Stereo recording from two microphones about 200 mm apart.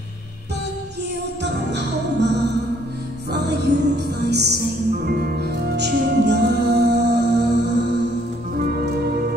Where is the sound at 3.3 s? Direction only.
55° right (ahead or behind).